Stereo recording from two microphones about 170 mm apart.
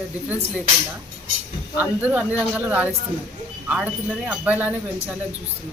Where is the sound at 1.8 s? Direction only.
10° right (ahead or behind).